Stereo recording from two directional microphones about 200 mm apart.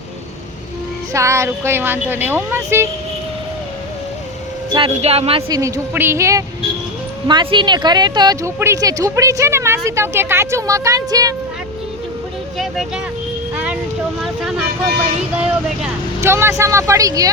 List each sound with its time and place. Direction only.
1.1 s speech: 15° right (ahead or behind)
4.7 s speech: 30° right (ahead or behind)
5.5 s speech: 15° right (ahead or behind)
14.2 s speech: centre (ahead or behind); by 17.3 s 15° right (ahead or behind)